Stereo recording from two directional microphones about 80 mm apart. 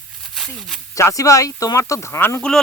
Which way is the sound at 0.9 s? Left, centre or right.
Left.